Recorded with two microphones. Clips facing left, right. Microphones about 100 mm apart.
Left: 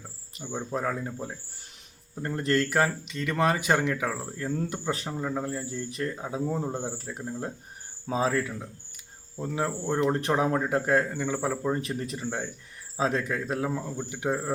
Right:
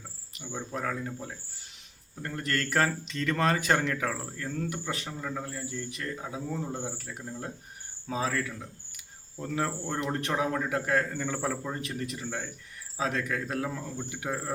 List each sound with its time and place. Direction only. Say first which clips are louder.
0.3 s speech: left 4 dB; 30° left (ahead or behind)
2.2 s speech: left 6 dB; 30° left (ahead or behind)
4.5 s speech: left 3 dB; 30° left (ahead or behind)
11.1 s speech: left 3 dB; 10° left (ahead or behind)
11.7 s speech: left 5 dB; 35° left (ahead or behind)